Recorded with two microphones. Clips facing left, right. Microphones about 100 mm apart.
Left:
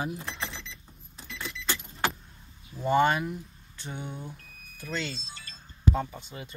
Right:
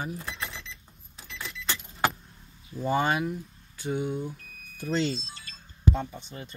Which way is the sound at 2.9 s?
5° right (ahead or behind).